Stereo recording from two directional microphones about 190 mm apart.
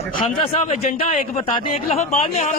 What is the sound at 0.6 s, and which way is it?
A man's voice, 35° left (ahead or behind).